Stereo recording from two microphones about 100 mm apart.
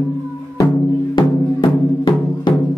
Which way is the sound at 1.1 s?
50° left (ahead or behind).